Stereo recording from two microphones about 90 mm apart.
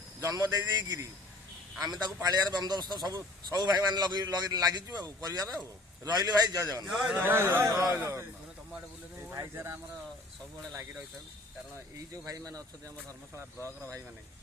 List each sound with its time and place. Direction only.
0.2 s a man's voice: 40° right (ahead or behind)
6.8 s speech: 5° right (ahead or behind)
7.2 s speech: 25° right (ahead or behind)
7.9 s speech: 20° right (ahead or behind)
9.3 s speech: 35° right (ahead or behind)
11.9 s speech: 40° right (ahead or behind)
13.6 s speech: 25° left (ahead or behind)